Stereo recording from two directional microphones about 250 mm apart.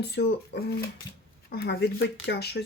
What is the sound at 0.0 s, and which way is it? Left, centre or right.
Speech, left.